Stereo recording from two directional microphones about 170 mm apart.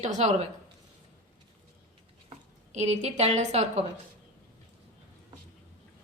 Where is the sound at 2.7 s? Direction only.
40° right (ahead or behind).